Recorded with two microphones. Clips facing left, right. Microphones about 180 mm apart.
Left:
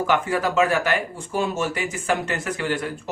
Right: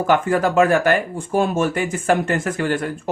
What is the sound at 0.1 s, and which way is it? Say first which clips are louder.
Speech: right 7 dB; 50° right (ahead or behind).